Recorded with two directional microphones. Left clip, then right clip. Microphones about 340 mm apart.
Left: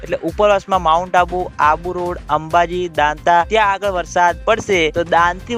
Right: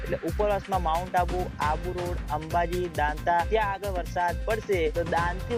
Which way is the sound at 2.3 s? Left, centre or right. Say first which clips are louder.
Left 12 dB; left.